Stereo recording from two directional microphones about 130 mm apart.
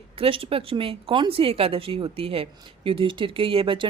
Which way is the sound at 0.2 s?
45° right (ahead or behind).